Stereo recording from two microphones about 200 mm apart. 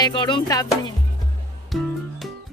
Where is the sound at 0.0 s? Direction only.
20° left (ahead or behind).